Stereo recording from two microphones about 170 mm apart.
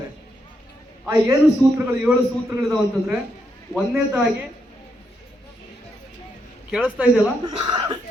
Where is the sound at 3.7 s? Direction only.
10° right (ahead or behind).